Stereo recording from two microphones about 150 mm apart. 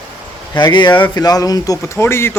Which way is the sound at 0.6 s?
30° left (ahead or behind).